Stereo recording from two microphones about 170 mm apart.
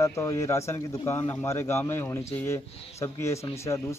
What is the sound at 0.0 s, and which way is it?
A man's voice, 15° left (ahead or behind).